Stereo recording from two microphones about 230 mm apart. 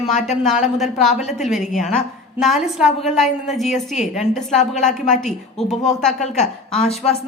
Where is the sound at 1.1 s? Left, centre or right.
Left.